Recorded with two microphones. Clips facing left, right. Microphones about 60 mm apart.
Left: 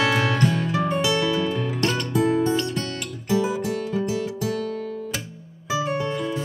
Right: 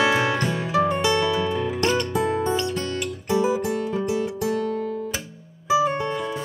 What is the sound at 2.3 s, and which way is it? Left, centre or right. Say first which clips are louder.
Music: left 2 dB; centre.